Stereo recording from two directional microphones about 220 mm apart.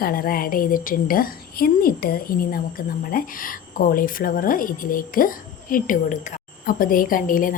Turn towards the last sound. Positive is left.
turn(degrees=40)  # may be behind; listen again after turning